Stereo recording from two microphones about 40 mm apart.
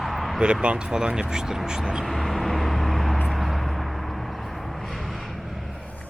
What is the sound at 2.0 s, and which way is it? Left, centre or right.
Vehicle, centre.